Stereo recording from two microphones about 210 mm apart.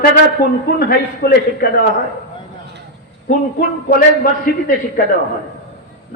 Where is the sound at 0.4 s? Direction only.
45° left (ahead or behind).